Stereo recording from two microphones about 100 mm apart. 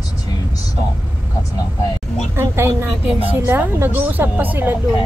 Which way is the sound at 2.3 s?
25° right (ahead or behind).